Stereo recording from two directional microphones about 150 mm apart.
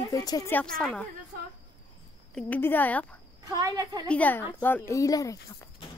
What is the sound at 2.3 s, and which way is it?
Speech, 10° left (ahead or behind).